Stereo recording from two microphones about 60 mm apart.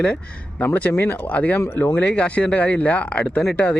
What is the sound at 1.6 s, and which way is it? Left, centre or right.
Speech, left.